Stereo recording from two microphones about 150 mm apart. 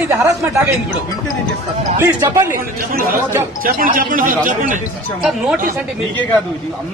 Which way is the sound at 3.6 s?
70° right (ahead or behind).